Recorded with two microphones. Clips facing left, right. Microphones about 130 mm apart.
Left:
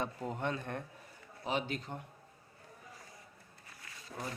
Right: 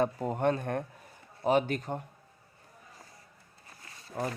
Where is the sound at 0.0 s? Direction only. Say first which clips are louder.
Right 9 dB; 45° right (ahead or behind).